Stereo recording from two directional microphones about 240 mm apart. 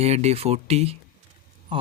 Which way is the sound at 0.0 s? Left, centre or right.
Right.